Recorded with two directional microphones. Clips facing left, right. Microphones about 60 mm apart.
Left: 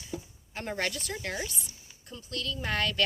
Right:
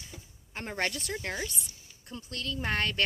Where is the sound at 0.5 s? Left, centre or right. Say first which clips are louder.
Even; right.